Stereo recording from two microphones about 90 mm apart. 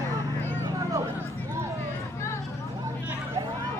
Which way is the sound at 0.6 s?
30° right (ahead or behind).